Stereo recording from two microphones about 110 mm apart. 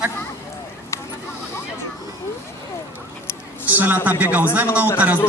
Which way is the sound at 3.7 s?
15° right (ahead or behind).